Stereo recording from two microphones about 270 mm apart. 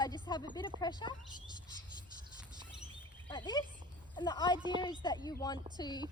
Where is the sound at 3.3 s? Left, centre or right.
Centre.